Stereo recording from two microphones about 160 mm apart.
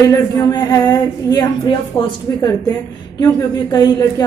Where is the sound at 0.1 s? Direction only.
20° left (ahead or behind).